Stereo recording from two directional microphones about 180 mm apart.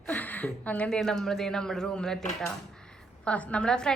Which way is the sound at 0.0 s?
10° left (ahead or behind).